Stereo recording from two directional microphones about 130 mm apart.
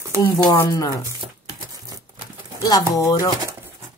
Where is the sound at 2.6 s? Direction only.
30° left (ahead or behind).